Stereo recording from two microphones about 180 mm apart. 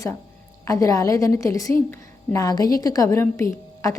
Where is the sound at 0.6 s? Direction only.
20° left (ahead or behind).